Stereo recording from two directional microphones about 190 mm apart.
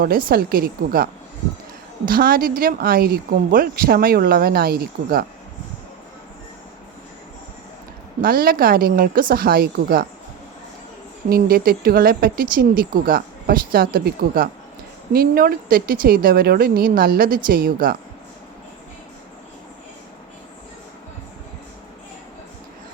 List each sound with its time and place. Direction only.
0.0 s speech: 50° right (ahead or behind)
8.2 s speech: 50° right (ahead or behind)
11.3 s speech: 50° right (ahead or behind)